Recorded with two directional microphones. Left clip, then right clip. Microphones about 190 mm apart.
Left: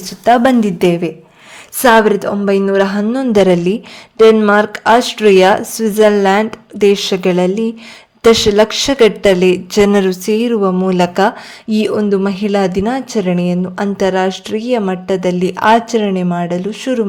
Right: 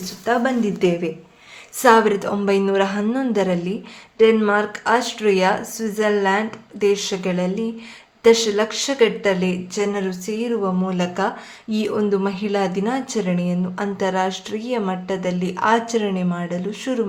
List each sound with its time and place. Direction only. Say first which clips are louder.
0.0 s speech: left 10 dB; 50° left (ahead or behind)
1.8 s speech: left 5 dB; 35° left (ahead or behind)